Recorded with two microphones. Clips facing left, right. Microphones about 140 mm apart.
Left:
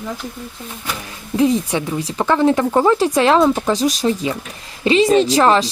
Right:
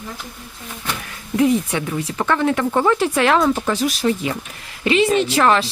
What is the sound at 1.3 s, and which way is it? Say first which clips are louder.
A woman's voice: left 1 dB; 35° left (ahead or behind).